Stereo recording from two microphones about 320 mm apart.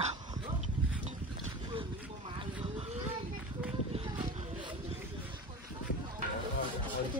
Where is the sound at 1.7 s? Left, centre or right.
Centre.